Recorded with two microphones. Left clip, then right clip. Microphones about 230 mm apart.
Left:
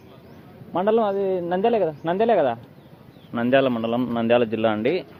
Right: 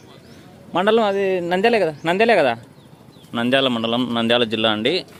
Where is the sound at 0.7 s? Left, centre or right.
Right.